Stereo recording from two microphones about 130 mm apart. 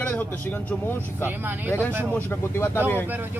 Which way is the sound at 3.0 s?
15° right (ahead or behind).